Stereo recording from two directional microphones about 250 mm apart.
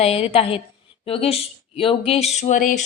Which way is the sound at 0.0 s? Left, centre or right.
Left.